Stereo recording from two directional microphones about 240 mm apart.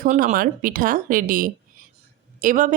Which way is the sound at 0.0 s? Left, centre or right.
Right.